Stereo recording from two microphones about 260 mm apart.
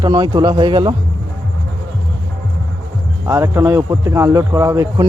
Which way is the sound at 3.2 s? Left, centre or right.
Centre.